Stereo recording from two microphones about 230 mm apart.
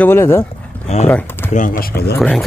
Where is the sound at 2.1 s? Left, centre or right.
Centre.